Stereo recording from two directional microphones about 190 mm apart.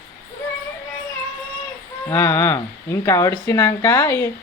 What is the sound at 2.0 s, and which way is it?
Speech, 15° left (ahead or behind).